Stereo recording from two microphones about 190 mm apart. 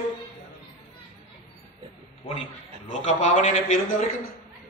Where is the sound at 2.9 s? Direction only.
40° left (ahead or behind).